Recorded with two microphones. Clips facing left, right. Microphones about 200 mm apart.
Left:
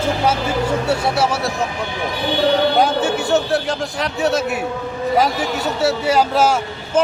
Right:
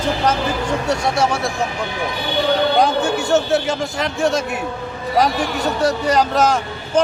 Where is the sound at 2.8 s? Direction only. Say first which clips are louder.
Even; 5° left (ahead or behind).